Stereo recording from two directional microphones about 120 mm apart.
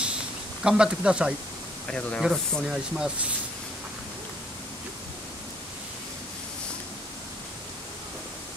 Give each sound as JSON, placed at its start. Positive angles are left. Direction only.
{"t": 0.7, "sound": "speech", "side_deg": -5}
{"t": 1.9, "sound": "speech", "side_deg": 10}